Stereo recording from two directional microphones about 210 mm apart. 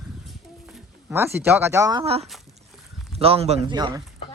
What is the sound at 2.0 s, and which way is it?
A man's voice, 30° right (ahead or behind).